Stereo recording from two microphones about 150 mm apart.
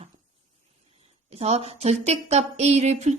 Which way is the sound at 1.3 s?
45° right (ahead or behind).